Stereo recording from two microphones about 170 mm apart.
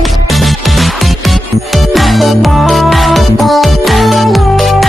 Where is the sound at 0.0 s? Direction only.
Centre (ahead or behind).